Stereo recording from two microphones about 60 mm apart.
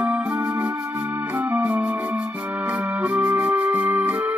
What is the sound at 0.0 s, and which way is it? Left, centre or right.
Music, right.